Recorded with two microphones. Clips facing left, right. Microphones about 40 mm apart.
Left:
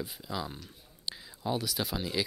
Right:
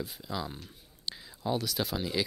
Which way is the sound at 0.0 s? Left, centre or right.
Centre.